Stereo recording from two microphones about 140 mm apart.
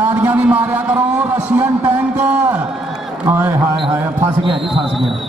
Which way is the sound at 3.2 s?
15° right (ahead or behind).